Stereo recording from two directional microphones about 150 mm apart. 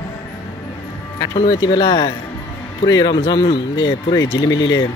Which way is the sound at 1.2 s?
25° left (ahead or behind).